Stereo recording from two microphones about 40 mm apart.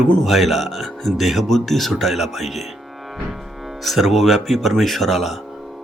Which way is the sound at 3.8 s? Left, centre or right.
Centre.